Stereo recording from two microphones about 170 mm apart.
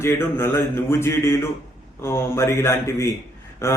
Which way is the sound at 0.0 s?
15° left (ahead or behind).